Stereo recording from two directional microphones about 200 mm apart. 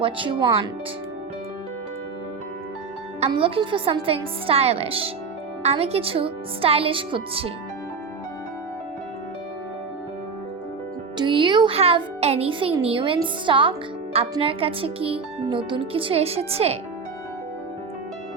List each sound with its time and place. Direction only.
0.0 s a child's voice: 25° right (ahead or behind)
3.2 s a child's voice: 30° right (ahead or behind)
11.2 s a child's voice: 25° right (ahead or behind)